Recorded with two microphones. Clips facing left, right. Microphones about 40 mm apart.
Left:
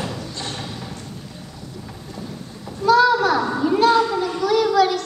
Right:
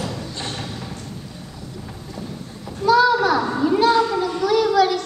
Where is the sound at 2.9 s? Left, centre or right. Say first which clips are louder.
Even; centre.